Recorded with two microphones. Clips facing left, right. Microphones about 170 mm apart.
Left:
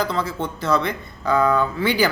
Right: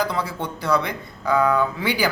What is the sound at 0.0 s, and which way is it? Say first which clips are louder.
Speech: left 1 dB; 15° right (ahead or behind).